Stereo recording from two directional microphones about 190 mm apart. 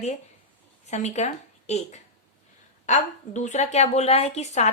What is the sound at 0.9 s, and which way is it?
A woman's voice, 35° left (ahead or behind).